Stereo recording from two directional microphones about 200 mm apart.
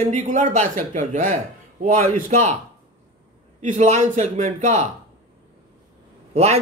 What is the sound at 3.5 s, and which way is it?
Speech, 35° right (ahead or behind).